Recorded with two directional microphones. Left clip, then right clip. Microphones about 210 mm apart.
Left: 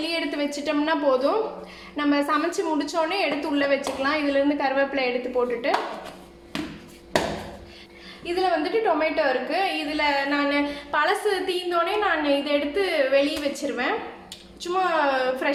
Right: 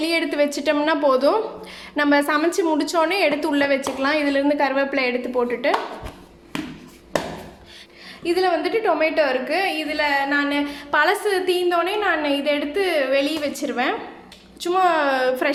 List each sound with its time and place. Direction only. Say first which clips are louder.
0.0 s a woman's voice: right 6 dB; 30° right (ahead or behind)
8.2 s a woman's voice: right 4 dB; 30° right (ahead or behind)